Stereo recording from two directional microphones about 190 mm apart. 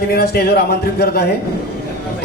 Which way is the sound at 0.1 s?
55° left (ahead or behind).